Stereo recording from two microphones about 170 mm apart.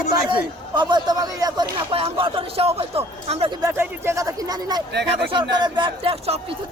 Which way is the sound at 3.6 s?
15° right (ahead or behind).